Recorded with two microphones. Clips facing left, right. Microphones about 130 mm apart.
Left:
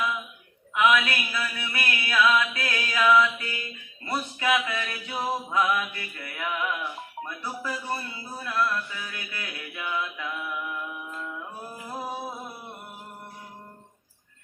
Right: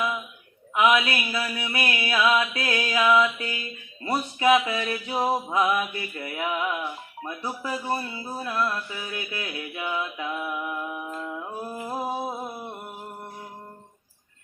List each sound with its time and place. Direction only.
0.7 s mantra: 25° right (ahead or behind)
10.9 s music: 40° right (ahead or behind); by 12.5 s 25° right (ahead or behind)